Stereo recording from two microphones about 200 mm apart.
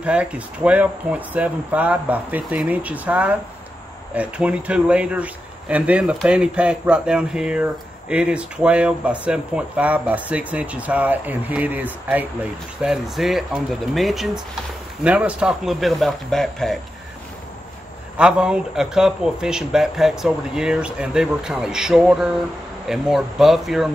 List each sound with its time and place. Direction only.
0.0 s speech: 5° right (ahead or behind)
18.1 s speech: 5° right (ahead or behind)